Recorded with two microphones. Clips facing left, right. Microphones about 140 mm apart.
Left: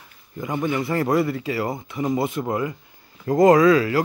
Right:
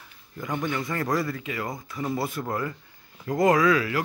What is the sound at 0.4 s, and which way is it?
Speech, 10° left (ahead or behind).